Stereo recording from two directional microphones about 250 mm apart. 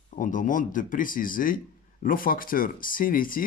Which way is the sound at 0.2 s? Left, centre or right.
Left.